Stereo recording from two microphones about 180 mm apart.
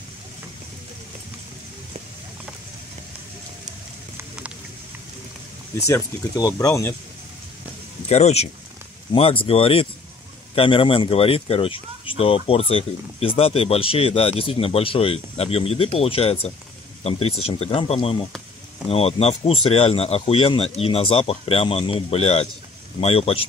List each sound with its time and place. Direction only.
5.8 s speech: 15° left (ahead or behind)
8.1 s speech: 35° left (ahead or behind)